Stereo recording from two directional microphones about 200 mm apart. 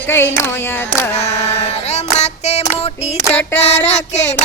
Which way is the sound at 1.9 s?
35° left (ahead or behind).